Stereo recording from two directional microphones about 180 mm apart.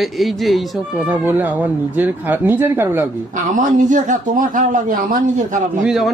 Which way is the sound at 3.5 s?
45° right (ahead or behind).